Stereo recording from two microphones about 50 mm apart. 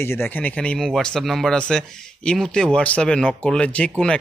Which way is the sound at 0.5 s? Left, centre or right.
Left.